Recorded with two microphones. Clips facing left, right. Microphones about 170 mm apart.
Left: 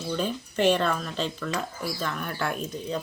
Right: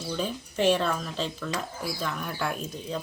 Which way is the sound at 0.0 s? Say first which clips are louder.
Left 2 dB; centre (ahead or behind).